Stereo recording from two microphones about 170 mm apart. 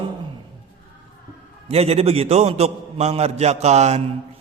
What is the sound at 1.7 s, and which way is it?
A man's voice, 35° right (ahead or behind).